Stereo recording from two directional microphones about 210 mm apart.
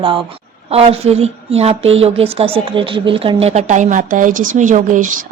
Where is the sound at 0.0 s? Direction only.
25° right (ahead or behind).